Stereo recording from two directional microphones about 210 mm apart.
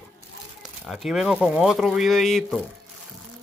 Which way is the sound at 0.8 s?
Centre (ahead or behind).